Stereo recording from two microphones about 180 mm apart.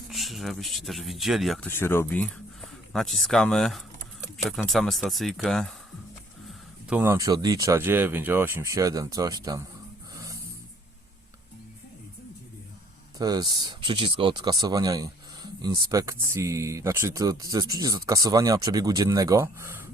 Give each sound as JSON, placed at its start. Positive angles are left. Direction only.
{"t": 0.1, "sound": "speech", "side_deg": 0}
{"t": 1.7, "sound": "speech", "side_deg": 15}
{"t": 6.9, "sound": "speech", "side_deg": -15}
{"t": 13.1, "sound": "speech", "side_deg": -20}